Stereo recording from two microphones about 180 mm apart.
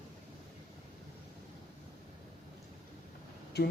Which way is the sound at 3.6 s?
65° left (ahead or behind).